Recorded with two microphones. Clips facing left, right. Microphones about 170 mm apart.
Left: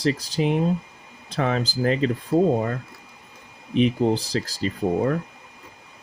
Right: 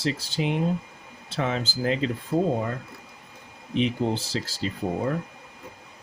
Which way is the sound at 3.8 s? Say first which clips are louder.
Left 5 dB; 40° left (ahead or behind).